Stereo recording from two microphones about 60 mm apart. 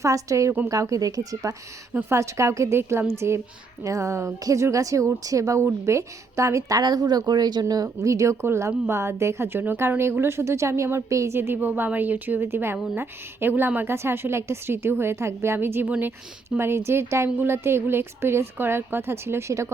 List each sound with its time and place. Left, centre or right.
0.0 s a woman's voice: right
0.7 s speech: right
2.0 s a woman's voice: right
11.3 s a woman's voice: right
16.6 s a woman's voice: right